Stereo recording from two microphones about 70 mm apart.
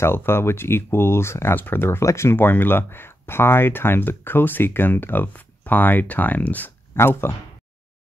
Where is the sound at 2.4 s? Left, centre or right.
Left.